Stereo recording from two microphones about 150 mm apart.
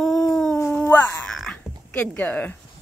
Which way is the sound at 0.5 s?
15° left (ahead or behind).